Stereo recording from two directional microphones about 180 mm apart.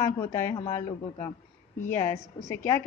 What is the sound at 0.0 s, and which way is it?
Speech, 15° left (ahead or behind).